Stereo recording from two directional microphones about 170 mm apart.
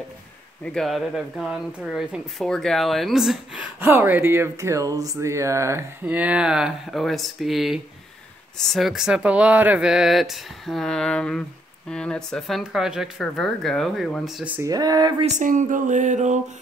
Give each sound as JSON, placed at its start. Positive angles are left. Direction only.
{"t": 0.7, "sound": "speech", "side_deg": 0}
{"t": 3.8, "sound": "speech", "side_deg": -10}
{"t": 14.7, "sound": "speech", "side_deg": -20}
{"t": 15.2, "sound": "speech", "side_deg": -45}